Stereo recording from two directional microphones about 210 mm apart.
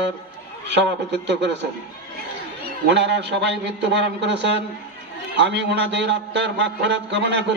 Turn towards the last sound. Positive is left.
turn(degrees=-55)  # may be behind; listen again after turning